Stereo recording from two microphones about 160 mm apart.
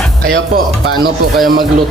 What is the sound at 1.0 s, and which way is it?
Speech, 90° right.